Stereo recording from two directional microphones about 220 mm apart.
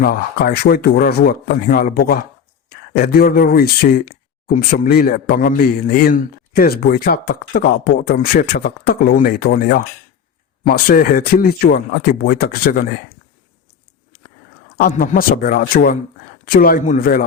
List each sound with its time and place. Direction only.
0.0 s speech: 40° left (ahead or behind)
14.8 s speech: 40° left (ahead or behind)